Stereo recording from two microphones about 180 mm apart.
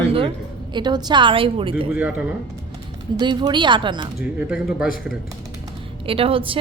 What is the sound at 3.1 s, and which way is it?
Speech, 25° right (ahead or behind).